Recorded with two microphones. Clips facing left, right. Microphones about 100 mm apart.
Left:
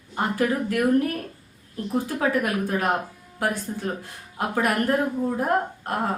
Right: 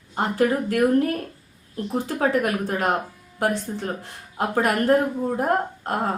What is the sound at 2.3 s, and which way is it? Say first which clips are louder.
Speech: right 2 dB; 30° right (ahead or behind).